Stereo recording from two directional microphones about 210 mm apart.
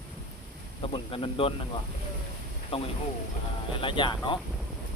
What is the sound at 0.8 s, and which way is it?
Speech, 25° left (ahead or behind).